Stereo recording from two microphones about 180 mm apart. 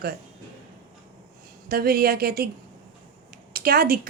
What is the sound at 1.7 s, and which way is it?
Speech, 55° right (ahead or behind).